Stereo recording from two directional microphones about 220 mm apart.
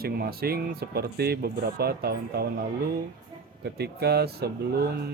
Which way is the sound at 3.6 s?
45° right (ahead or behind).